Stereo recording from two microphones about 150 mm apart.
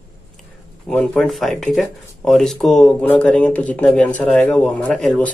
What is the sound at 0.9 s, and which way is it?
Speech, 5° left (ahead or behind).